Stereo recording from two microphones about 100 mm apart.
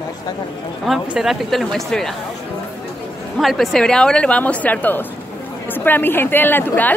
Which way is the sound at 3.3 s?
Centre (ahead or behind).